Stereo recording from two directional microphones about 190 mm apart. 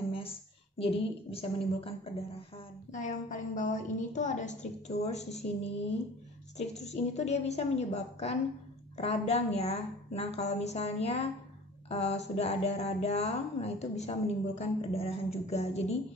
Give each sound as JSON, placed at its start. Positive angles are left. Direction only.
{"t": 0.7, "sound": "a woman's voice", "side_deg": 30}